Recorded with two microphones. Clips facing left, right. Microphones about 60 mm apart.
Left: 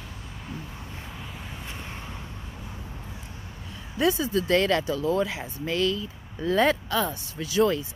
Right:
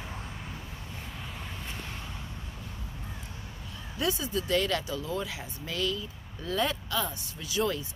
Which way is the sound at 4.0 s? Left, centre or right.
Left.